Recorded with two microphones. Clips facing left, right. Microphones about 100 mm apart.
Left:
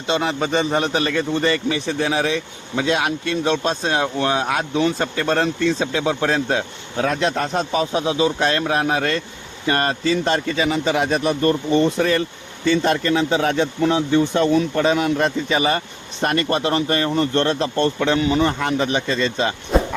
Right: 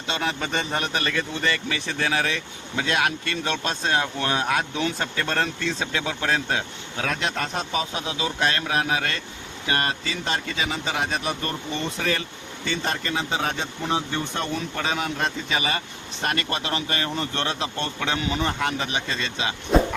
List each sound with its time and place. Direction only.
0.1 s a man's voice: 25° left (ahead or behind); by 13.7 s 55° left (ahead or behind)
13.8 s speech: 90° left
14.5 s speech: 50° left (ahead or behind)
15.2 s speech: 40° left (ahead or behind)